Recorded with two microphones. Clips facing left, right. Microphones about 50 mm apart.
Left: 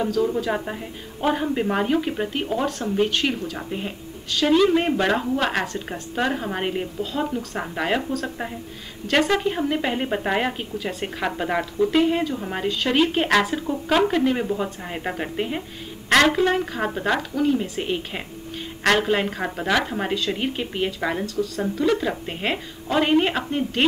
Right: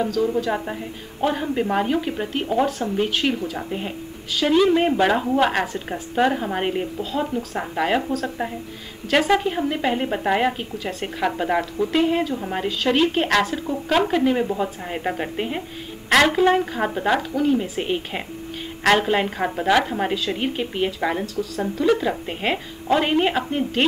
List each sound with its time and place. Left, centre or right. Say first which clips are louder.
0.0 s a woman's voice: right 1 dB; centre